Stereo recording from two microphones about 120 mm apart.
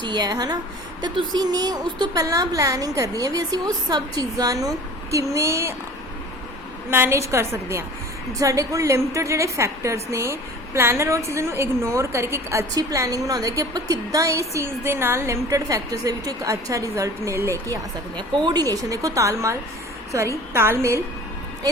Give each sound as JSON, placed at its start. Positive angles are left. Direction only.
{"t": 0.0, "sound": "a woman's voice", "side_deg": -35}
{"t": 6.9, "sound": "a woman's voice", "side_deg": -20}
{"t": 18.2, "sound": "a woman's voice", "side_deg": -40}